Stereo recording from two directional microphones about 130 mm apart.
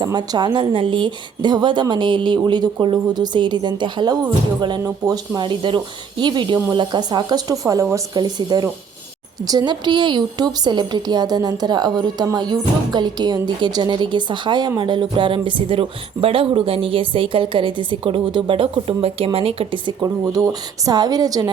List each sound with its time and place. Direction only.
0.0 s a woman's voice: 30° right (ahead or behind)
20.0 s speech: 25° right (ahead or behind)